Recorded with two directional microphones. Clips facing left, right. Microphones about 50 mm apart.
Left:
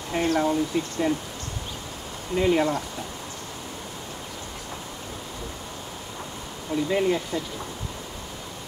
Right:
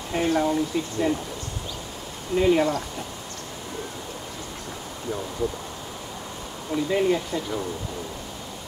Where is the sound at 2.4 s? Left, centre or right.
Centre.